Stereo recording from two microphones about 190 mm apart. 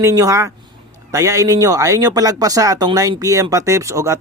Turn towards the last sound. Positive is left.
turn(degrees=-15)  # may be behind; listen again after turning